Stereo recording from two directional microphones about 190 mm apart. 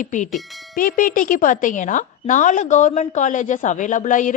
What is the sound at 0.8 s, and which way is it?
A woman's voice, 45° left (ahead or behind).